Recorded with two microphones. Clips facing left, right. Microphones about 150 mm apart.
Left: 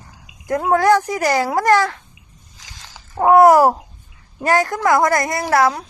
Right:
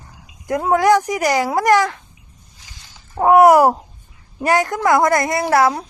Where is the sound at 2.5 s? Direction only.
90° left.